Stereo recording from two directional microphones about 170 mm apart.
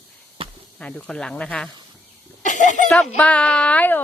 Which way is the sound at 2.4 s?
45° left (ahead or behind).